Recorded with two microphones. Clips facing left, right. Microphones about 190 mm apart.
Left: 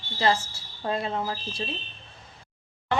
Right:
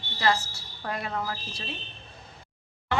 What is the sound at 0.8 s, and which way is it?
Speech, 25° left (ahead or behind).